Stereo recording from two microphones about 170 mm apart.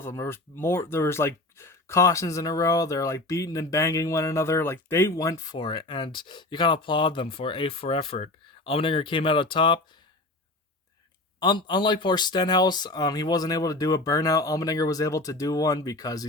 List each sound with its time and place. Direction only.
0.0 s speech: 15° left (ahead or behind)
11.3 s speech: 25° left (ahead or behind)